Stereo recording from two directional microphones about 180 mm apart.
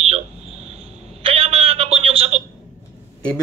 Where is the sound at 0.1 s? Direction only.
35° right (ahead or behind).